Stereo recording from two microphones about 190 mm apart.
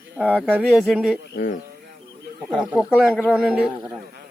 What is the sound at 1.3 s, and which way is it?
Speech, 65° left (ahead or behind).